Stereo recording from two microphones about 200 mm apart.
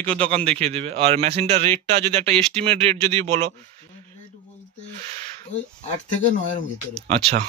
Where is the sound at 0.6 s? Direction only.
30° right (ahead or behind).